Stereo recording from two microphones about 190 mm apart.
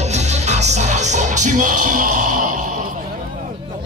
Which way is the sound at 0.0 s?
35° right (ahead or behind).